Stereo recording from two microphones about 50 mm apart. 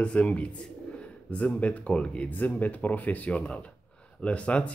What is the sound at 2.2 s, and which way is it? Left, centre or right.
Speech, left.